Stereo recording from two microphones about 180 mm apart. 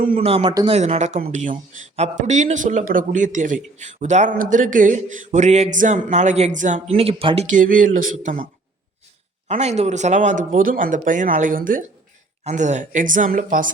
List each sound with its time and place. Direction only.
0.0 s speech: 50° right (ahead or behind)
0.3 s speech: 35° right (ahead or behind)
0.8 s speech: 40° right (ahead or behind)
7.5 s speech: 50° right (ahead or behind)
9.5 s speech: 40° right (ahead or behind)